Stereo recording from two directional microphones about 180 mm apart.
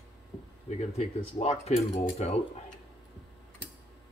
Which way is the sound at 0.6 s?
35° left (ahead or behind).